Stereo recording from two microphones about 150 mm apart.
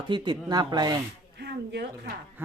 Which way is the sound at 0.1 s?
30° right (ahead or behind).